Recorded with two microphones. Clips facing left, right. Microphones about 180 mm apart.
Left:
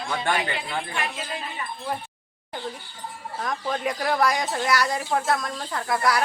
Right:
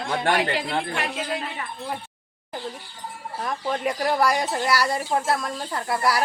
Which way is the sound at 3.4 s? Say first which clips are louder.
Right 1 dB; 5° right (ahead or behind).